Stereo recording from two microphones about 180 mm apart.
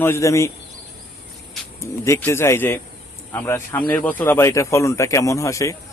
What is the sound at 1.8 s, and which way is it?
A man's voice, 15° left (ahead or behind).